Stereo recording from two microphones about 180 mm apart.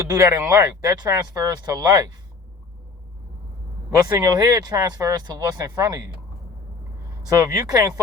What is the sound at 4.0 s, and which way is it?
Speech, 20° right (ahead or behind).